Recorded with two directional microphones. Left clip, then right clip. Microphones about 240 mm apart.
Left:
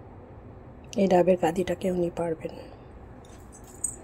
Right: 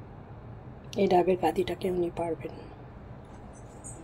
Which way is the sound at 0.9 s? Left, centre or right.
Left.